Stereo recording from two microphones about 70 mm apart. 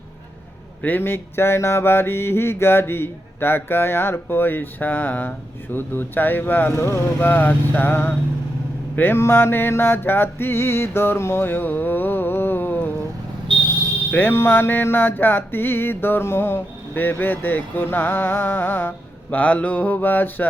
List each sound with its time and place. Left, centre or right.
0.8 s music: left
5.7 s mantra: left
6.7 s music: left
7.2 s mantra: left
9.0 s music: left
14.1 s music: left
19.4 s mantra: centre